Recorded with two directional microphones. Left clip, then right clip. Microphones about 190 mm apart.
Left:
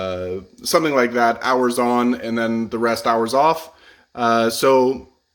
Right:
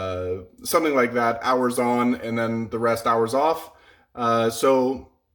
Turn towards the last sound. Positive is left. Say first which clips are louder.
# left 4 dB
turn(degrees=30)  # may be behind; listen again after turning